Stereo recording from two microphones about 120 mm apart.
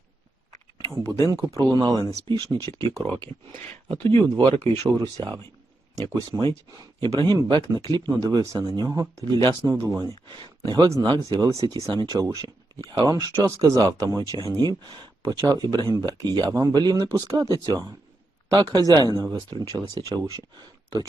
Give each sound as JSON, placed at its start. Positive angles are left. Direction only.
{"t": 1.0, "sound": "speech", "side_deg": -30}